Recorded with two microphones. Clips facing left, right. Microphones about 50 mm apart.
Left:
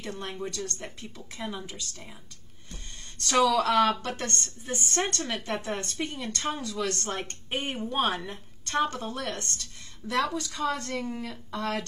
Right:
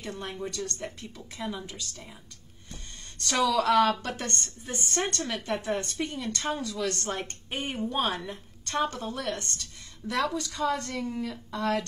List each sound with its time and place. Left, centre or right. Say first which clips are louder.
0.0 s a woman's voice: even; centre
3.3 s a woman's voice: left 1 dB; centre
7.4 s a woman's voice: even; left; by 11.8 s centre